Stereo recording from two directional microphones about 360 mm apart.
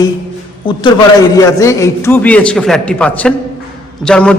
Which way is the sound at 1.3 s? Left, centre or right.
Centre.